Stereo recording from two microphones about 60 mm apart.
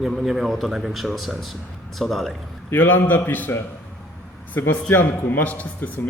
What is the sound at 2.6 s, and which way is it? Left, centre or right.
Speech, left.